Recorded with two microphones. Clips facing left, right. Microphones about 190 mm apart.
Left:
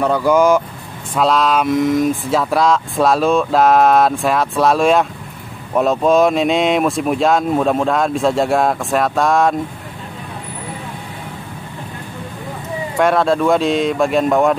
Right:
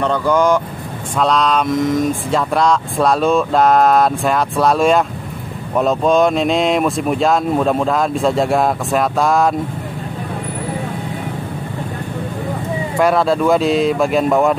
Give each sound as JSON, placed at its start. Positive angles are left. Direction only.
{"t": 0.0, "sound": "speech", "side_deg": 10}
{"t": 12.9, "sound": "speech", "side_deg": 0}